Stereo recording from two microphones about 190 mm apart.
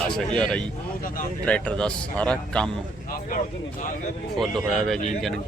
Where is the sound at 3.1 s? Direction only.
45° left (ahead or behind).